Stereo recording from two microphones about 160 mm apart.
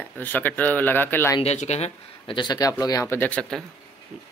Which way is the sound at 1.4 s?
45° left (ahead or behind).